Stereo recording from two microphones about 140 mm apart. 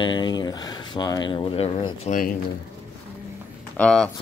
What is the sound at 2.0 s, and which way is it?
Speech, 75° left (ahead or behind).